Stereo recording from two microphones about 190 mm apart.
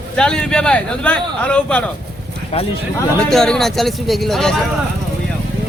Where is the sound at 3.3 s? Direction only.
Centre (ahead or behind).